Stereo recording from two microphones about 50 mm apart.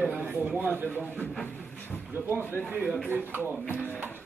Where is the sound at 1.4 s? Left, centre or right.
Left.